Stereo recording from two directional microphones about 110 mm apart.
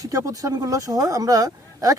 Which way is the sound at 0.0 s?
30° right (ahead or behind).